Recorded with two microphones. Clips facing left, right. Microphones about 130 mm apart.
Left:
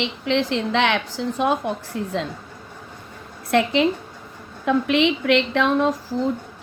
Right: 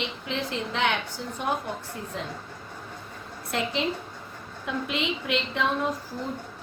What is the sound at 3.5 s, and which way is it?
A woman's voice, 85° left.